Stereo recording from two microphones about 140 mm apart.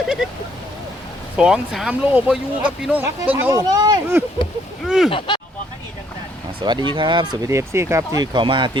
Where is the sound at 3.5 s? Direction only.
30° right (ahead or behind).